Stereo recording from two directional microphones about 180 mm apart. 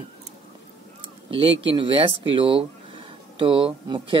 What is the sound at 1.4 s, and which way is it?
Speech, 30° right (ahead or behind).